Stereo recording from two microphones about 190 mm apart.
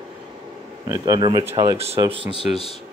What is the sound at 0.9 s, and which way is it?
A man's voice, 20° right (ahead or behind).